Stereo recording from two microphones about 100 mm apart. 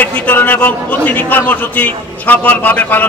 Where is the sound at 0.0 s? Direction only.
20° left (ahead or behind).